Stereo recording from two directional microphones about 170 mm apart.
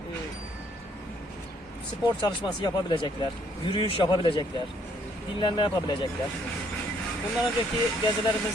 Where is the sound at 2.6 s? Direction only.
25° left (ahead or behind).